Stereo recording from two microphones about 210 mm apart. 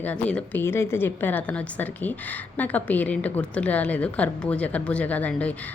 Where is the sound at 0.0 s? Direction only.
5° left (ahead or behind).